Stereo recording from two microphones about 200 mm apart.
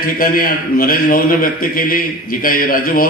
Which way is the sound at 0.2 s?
45° left (ahead or behind).